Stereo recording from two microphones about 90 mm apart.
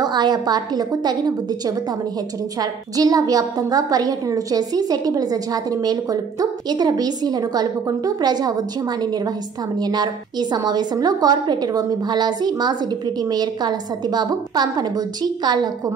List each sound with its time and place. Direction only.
0.0 s a woman's voice: 50° right (ahead or behind)
2.6 s a woman's voice: 45° right (ahead or behind)
9.8 s a woman's voice: 50° right (ahead or behind)